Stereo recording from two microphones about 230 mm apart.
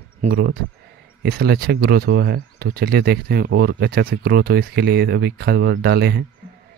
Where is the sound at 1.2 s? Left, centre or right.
Right.